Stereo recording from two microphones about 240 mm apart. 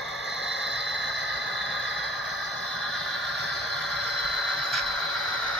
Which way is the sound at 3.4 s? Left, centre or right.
Centre.